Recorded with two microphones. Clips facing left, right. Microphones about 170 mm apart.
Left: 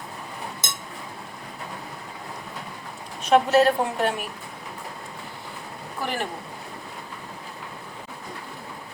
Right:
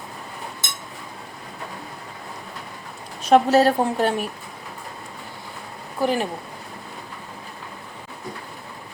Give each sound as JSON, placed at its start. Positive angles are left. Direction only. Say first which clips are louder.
{"t": 3.2, "sound": "a woman's voice", "louder": "right 2 dB", "side_deg": -35}
{"t": 6.0, "sound": "speech", "louder": "right 7 dB", "side_deg": -15}